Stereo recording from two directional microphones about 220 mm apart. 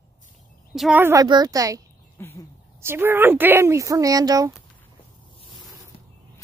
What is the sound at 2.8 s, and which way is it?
Speech, 10° right (ahead or behind).